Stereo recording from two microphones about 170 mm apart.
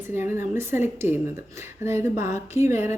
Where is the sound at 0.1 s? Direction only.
15° right (ahead or behind).